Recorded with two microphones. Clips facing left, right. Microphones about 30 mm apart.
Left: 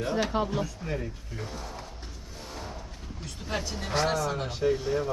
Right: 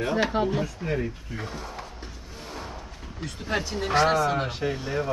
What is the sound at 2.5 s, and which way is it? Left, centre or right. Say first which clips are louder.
Music: right 3 dB; centre.